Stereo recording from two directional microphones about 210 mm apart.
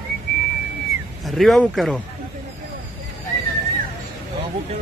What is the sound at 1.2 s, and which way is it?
Speech, centre (ahead or behind).